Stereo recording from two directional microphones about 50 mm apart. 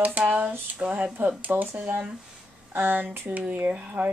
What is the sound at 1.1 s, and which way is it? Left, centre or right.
Speech, right.